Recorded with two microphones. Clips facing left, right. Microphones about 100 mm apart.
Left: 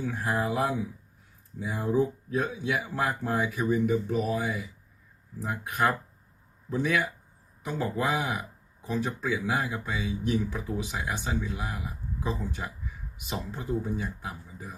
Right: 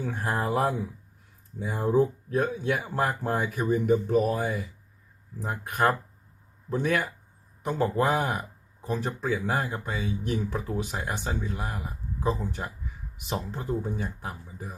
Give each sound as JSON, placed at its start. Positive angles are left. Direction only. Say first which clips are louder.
{"t": 0.0, "sound": "speech", "louder": "even", "side_deg": -45}